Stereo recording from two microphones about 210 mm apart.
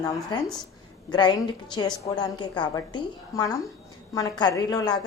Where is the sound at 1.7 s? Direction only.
20° left (ahead or behind).